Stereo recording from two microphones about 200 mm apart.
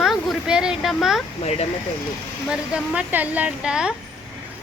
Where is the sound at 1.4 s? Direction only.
30° left (ahead or behind).